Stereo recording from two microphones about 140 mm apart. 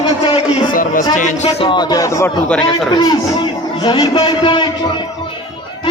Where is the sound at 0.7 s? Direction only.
75° left (ahead or behind).